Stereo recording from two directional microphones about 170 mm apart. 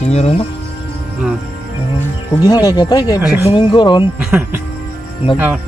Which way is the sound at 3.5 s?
25° left (ahead or behind).